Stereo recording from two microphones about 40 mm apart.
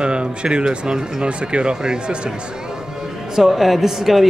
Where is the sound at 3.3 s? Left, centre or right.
Centre.